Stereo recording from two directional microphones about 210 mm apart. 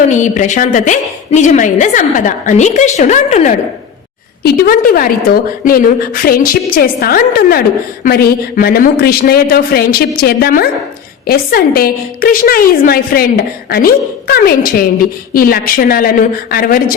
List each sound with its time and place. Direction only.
0.1 s a woman's voice: 35° left (ahead or behind)
4.4 s a man's voice: 45° left (ahead or behind)